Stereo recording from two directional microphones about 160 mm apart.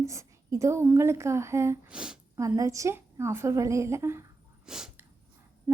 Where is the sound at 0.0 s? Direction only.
20° right (ahead or behind).